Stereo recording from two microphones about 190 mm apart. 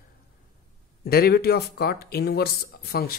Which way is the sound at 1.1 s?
55° left (ahead or behind).